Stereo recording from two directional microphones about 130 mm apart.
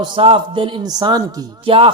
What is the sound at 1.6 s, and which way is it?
Speech, 45° right (ahead or behind).